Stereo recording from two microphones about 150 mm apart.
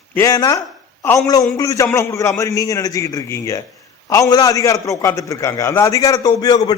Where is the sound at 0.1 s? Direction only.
20° left (ahead or behind).